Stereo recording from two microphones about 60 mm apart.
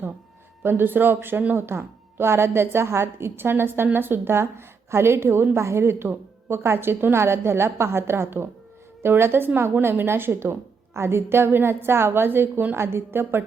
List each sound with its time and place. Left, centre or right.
0.6 s a woman's voice: right